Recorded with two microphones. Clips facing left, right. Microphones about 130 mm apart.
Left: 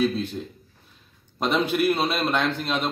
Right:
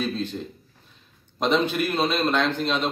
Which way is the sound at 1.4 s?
5° left (ahead or behind).